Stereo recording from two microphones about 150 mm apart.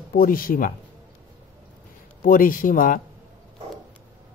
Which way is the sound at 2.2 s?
65° left (ahead or behind).